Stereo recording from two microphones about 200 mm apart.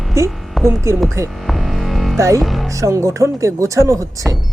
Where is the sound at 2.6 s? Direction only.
15° right (ahead or behind).